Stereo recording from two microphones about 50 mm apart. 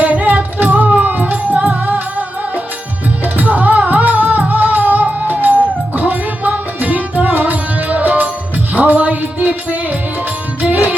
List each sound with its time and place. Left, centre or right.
0.0 s music: right
3.3 s music: right